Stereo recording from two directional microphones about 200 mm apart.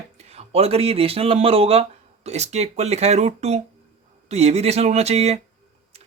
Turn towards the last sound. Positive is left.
turn(degrees=-30)  # may be behind; listen again after turning